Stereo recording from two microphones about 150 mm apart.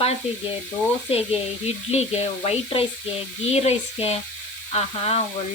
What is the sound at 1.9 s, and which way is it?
Sizzle, 45° left (ahead or behind).